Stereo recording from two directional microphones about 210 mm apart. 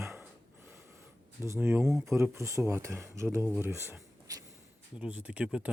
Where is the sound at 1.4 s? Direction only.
10° right (ahead or behind).